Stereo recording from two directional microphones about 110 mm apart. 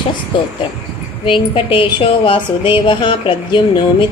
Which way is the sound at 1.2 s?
50° left (ahead or behind).